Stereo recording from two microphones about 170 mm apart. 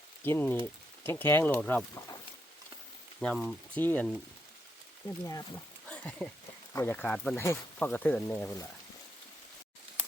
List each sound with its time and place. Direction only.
0.3 s speech: 10° left (ahead or behind)
3.2 s speech: 5° left (ahead or behind)
5.2 s speech: 15° left (ahead or behind)
5.9 s speech: 5° left (ahead or behind)